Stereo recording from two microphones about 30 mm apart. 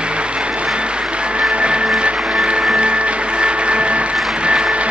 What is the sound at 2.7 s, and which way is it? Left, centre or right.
Music, right.